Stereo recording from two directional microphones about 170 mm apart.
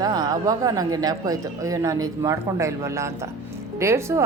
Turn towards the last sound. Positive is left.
turn(degrees=-15)  # may be behind; listen again after turning